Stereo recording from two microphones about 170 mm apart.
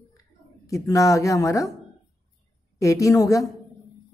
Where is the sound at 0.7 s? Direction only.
20° left (ahead or behind).